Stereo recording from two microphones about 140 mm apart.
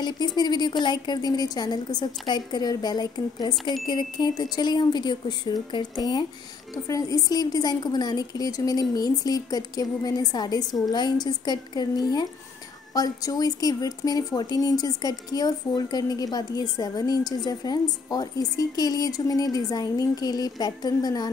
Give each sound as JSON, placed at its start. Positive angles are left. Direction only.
{"t": 0.4, "sound": "a woman's voice", "side_deg": 30}